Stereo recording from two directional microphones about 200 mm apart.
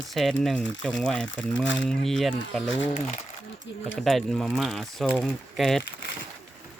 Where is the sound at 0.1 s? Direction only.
Centre (ahead or behind).